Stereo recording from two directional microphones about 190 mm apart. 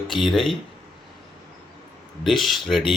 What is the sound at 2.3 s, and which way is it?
Speech, centre (ahead or behind).